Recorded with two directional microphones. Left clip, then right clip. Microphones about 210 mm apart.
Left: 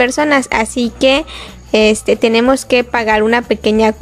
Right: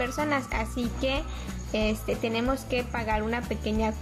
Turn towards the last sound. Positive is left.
turn(degrees=50)  # may be behind; listen again after turning